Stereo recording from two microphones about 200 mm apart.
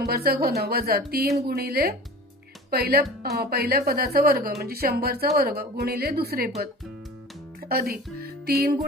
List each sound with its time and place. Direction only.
0.1 s a woman's voice: 50° right (ahead or behind)